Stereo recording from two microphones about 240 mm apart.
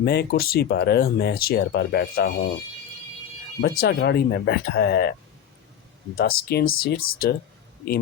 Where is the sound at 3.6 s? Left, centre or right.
Left.